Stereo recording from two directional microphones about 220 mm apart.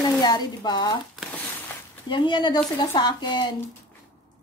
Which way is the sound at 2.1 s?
20° left (ahead or behind).